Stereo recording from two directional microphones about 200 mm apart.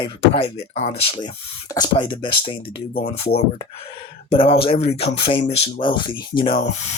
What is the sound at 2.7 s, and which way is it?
Speech, 50° left (ahead or behind).